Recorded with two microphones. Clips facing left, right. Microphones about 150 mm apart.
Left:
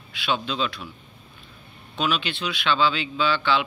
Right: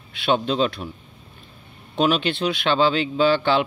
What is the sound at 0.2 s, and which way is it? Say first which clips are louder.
Speech: right 6 dB; 45° right (ahead or behind).